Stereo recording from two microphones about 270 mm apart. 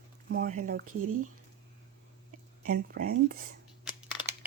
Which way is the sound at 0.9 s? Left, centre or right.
Right.